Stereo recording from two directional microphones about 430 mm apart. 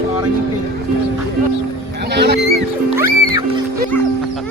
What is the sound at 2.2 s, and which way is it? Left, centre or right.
Speech, right.